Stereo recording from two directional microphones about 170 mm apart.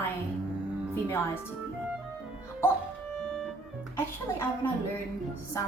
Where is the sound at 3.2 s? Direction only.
5° left (ahead or behind).